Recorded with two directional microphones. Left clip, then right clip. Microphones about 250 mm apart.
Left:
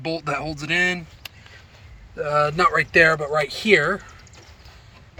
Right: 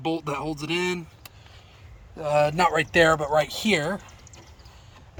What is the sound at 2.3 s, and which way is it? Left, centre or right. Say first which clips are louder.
Speech: left 2 dB; centre.